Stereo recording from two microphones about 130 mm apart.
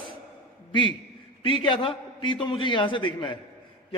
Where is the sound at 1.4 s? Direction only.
40° left (ahead or behind).